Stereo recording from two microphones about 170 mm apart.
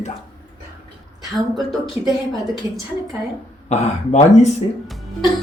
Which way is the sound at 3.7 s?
45° left (ahead or behind).